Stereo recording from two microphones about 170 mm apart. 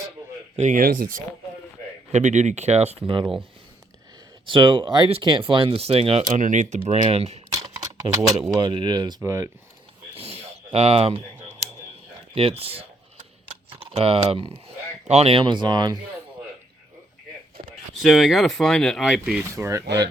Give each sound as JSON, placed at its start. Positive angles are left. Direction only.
{"t": 0.5, "sound": "speech", "side_deg": -45}
{"t": 2.1, "sound": "speech", "side_deg": -45}
{"t": 4.4, "sound": "speech", "side_deg": -30}
{"t": 6.3, "sound": "speech", "side_deg": -45}
{"t": 7.5, "sound": "typing", "side_deg": -20}
{"t": 8.5, "sound": "speech", "side_deg": -25}
{"t": 10.2, "sound": "a sound", "side_deg": -35}
{"t": 12.3, "sound": "speech", "side_deg": -35}
{"t": 18.0, "sound": "speech", "side_deg": 0}
{"t": 19.4, "sound": "speech", "side_deg": -15}
{"t": 19.8, "sound": "speech", "side_deg": -80}